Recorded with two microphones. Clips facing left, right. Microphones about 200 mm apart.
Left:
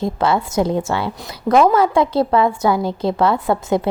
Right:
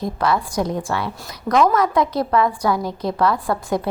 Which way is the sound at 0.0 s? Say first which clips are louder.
Left 3 dB; 25° left (ahead or behind).